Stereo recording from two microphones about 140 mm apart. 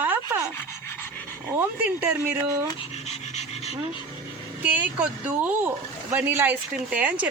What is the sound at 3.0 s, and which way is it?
Pant, 50° left (ahead or behind).